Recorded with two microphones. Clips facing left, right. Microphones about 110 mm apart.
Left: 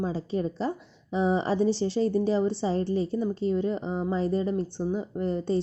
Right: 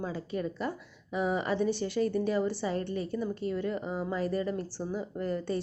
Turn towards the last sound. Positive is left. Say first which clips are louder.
# left 4 dB
turn(degrees=25)  # may be behind; listen again after turning